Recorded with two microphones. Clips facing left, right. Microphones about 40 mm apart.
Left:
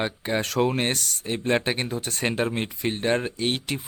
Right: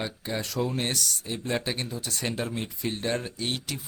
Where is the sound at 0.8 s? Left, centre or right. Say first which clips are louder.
Left 3 dB; left.